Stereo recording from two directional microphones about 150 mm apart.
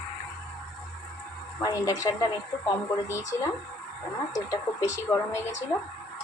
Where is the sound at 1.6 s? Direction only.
25° left (ahead or behind).